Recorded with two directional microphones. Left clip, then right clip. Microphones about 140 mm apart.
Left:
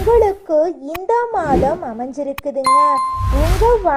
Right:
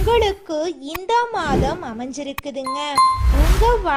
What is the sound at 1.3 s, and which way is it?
Speech, 25° right (ahead or behind).